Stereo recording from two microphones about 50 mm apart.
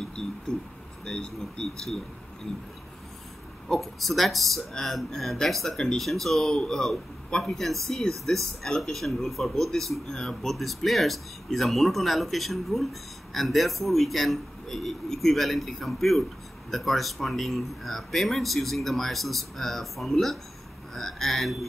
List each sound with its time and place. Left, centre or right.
0.5 s speech: centre
3.6 s speech: centre
10.4 s speech: centre